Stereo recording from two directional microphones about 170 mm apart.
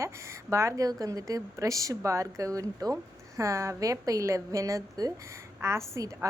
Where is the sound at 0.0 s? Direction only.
15° right (ahead or behind).